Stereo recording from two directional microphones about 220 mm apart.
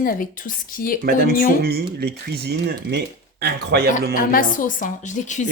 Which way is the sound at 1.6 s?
45° right (ahead or behind).